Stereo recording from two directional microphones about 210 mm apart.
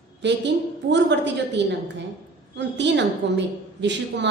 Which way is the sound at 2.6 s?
55° right (ahead or behind).